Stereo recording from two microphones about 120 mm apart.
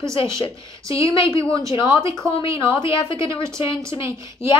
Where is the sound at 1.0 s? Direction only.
30° right (ahead or behind).